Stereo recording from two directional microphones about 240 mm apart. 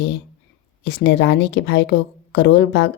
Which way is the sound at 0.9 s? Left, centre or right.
Left.